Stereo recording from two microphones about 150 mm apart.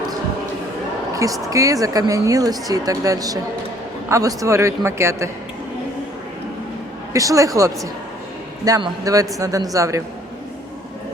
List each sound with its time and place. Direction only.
1.1 s speech: 20° right (ahead or behind)
7.1 s speech: 20° right (ahead or behind)